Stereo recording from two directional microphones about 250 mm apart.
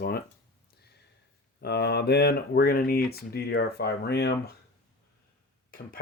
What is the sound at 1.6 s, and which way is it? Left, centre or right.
Speech, left.